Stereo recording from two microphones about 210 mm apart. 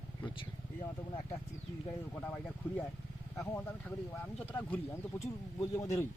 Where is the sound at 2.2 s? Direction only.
10° left (ahead or behind).